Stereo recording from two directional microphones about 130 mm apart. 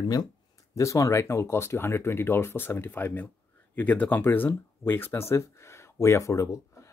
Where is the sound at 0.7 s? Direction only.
25° left (ahead or behind).